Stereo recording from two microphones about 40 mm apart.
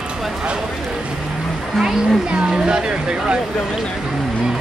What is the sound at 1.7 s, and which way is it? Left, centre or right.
Speech, centre.